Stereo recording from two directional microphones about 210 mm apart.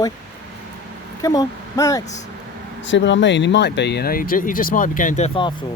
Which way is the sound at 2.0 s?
35° left (ahead or behind).